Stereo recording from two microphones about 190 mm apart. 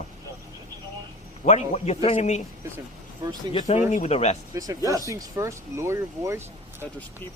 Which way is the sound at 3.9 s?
35° left (ahead or behind).